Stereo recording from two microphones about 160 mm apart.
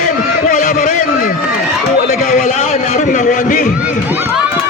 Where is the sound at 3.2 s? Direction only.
55° left (ahead or behind).